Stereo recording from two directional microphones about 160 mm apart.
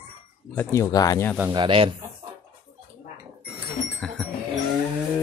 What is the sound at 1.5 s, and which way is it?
Speech, 30° right (ahead or behind).